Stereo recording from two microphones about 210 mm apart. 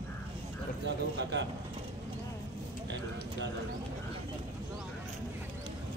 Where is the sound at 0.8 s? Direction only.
55° right (ahead or behind).